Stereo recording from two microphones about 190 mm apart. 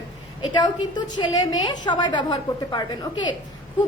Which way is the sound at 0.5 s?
25° left (ahead or behind).